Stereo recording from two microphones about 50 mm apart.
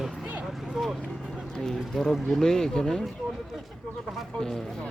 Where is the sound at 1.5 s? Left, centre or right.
Centre.